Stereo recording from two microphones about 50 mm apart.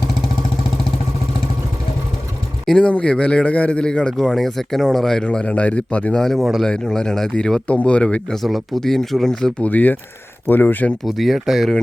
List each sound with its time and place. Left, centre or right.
2.8 s a man's voice: left
4.4 s speech: centre
5.2 s a man's voice: left
6.3 s speech: centre
6.7 s speech: centre
7.7 s a man's voice: left
8.3 s speech: centre
9.6 s speech: left
11.0 s speech: centre